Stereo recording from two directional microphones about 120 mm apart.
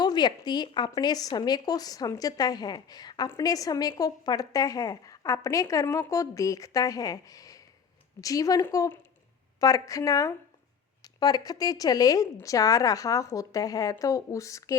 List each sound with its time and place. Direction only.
0.0 s a woman's voice: 40° left (ahead or behind)